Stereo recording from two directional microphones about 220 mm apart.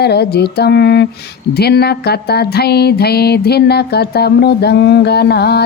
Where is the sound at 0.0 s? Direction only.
50° left (ahead or behind).